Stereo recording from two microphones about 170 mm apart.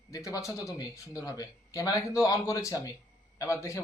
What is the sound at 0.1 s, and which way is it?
A man's voice, 20° left (ahead or behind).